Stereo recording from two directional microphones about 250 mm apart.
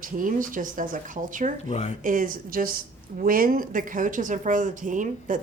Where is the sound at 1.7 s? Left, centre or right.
Left.